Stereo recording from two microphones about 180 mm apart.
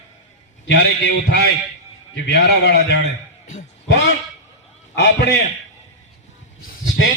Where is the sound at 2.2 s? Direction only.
65° left (ahead or behind).